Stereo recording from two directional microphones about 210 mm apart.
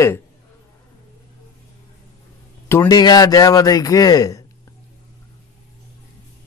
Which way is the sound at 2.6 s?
15° left (ahead or behind).